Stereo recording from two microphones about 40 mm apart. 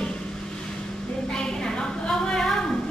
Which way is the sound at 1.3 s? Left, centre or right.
Centre.